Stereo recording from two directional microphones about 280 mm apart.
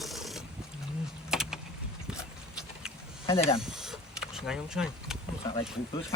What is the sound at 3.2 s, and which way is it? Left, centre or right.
Speech, centre.